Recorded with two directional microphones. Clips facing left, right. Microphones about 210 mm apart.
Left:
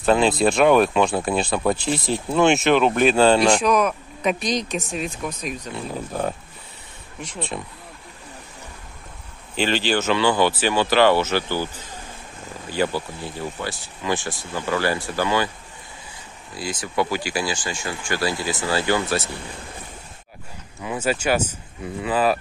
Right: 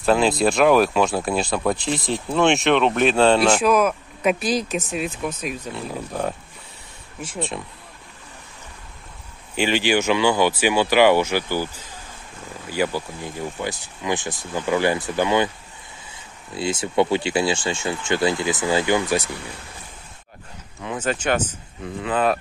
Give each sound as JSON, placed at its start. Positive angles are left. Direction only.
{"t": 0.0, "sound": "speech", "side_deg": 0}
{"t": 9.6, "sound": "speech", "side_deg": -10}
{"t": 16.5, "sound": "speech", "side_deg": -25}
{"t": 20.8, "sound": "speech", "side_deg": 10}